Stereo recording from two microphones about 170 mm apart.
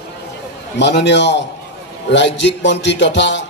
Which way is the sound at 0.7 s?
90° left.